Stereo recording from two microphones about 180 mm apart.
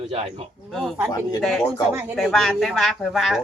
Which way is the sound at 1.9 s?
10° right (ahead or behind).